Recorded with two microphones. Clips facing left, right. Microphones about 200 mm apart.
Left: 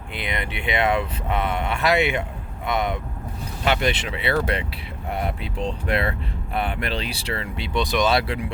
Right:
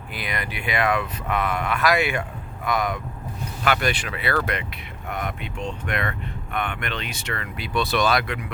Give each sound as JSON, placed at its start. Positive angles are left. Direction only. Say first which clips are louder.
{"t": 0.1, "sound": "speech", "louder": "left 2 dB", "side_deg": 25}
{"t": 8.1, "sound": "speech", "louder": "left 2 dB", "side_deg": 30}